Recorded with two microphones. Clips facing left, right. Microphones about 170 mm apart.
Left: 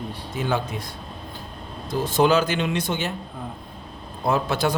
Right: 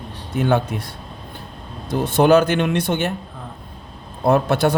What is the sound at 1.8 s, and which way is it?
A man's voice, 60° right (ahead or behind).